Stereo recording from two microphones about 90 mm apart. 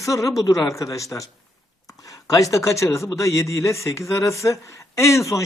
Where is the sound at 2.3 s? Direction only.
40° left (ahead or behind).